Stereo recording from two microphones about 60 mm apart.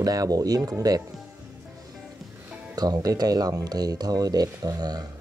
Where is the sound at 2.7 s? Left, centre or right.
Right.